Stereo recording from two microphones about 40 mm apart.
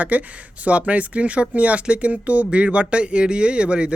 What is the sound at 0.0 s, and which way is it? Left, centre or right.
Speech, right.